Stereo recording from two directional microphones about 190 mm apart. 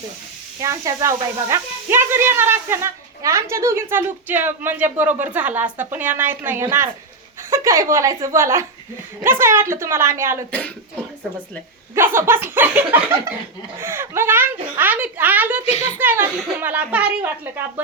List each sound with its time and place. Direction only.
0.6 s speech: 15° right (ahead or behind)
11.9 s speech: 10° right (ahead or behind)
15.7 s a child's voice: 35° left (ahead or behind)
16.0 s speech: 10° right (ahead or behind)